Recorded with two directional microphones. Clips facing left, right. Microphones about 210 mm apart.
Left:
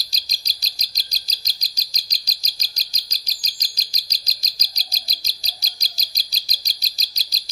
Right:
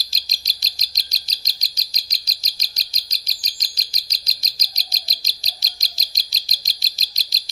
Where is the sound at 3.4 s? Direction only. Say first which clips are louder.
Even; 90° left.